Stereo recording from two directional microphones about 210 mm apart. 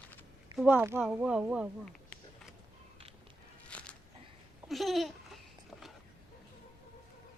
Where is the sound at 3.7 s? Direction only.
5° left (ahead or behind).